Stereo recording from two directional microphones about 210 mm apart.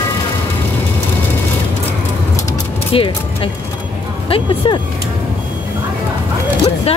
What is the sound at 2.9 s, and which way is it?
Speech, 25° left (ahead or behind).